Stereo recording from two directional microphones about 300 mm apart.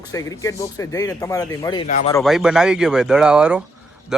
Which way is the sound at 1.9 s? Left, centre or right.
Left.